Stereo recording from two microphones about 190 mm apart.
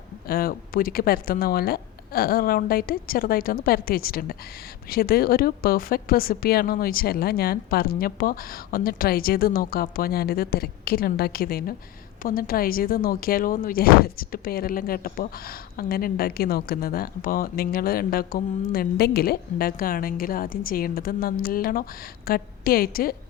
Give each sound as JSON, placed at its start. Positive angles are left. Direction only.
{"t": 0.3, "sound": "speech", "side_deg": 50}